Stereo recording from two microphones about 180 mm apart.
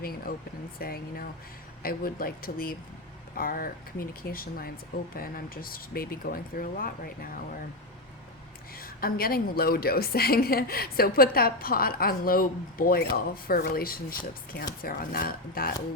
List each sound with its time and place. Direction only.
0.0 s a woman's voice: 55° left (ahead or behind)
8.8 s a woman's voice: 55° left (ahead or behind)